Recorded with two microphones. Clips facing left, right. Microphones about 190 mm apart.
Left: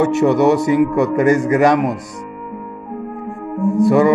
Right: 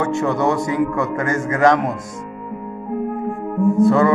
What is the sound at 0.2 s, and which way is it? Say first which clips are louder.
A man's voice: left 6 dB; 20° left (ahead or behind).